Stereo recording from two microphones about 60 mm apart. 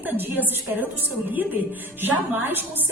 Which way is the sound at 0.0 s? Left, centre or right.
Right.